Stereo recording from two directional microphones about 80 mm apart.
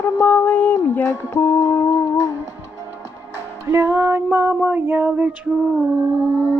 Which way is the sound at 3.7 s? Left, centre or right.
Right.